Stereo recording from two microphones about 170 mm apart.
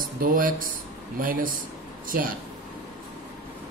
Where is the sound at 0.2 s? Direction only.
55° right (ahead or behind).